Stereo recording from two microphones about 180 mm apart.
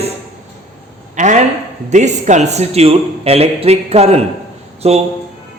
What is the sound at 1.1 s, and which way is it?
A man's voice, 40° right (ahead or behind).